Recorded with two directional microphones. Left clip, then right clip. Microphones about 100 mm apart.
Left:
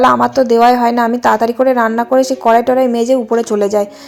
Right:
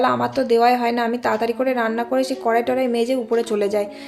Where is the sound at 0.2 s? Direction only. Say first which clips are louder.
Left 7 dB; 50° left (ahead or behind).